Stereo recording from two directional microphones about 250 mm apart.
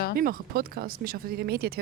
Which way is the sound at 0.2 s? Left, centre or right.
Right.